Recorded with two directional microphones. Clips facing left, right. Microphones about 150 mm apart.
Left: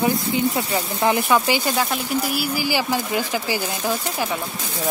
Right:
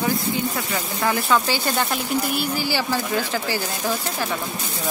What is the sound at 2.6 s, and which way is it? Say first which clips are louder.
Speech: left 1 dB; 15° left (ahead or behind).